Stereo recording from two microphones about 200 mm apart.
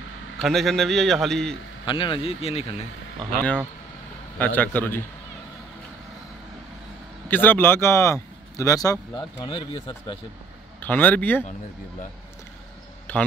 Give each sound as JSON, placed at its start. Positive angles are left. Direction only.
{"t": 0.4, "sound": "a man's voice", "side_deg": 0}
{"t": 1.9, "sound": "speech", "side_deg": 25}
{"t": 3.3, "sound": "a man's voice", "side_deg": 5}
{"t": 7.2, "sound": "speech", "side_deg": 10}
{"t": 10.8, "sound": "a man's voice", "side_deg": 10}
{"t": 13.1, "sound": "a man's voice", "side_deg": 10}